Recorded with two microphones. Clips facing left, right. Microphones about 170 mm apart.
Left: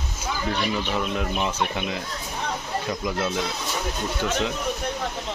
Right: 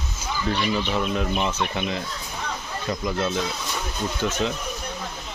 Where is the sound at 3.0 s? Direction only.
5° left (ahead or behind).